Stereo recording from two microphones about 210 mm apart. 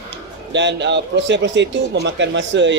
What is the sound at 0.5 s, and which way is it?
A man's voice, 55° right (ahead or behind).